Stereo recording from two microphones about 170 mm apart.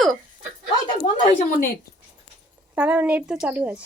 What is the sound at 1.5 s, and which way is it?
Speech, 55° left (ahead or behind).